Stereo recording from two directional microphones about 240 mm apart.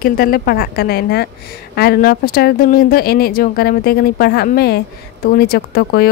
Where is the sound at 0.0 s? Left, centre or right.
Left.